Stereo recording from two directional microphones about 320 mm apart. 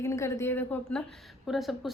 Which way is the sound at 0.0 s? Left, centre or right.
Centre.